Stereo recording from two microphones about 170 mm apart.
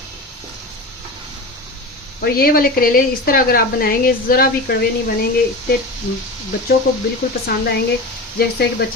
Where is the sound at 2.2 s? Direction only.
60° left (ahead or behind).